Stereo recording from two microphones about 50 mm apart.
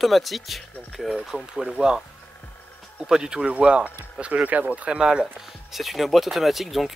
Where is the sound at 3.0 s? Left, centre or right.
Centre.